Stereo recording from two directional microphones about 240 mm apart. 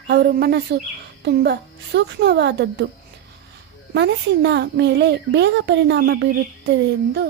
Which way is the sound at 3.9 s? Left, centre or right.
Right.